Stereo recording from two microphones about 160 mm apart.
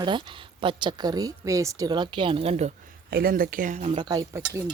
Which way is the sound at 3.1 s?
65° right (ahead or behind).